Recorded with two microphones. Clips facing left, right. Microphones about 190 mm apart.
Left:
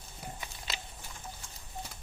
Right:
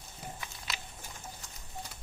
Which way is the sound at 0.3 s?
25° left (ahead or behind).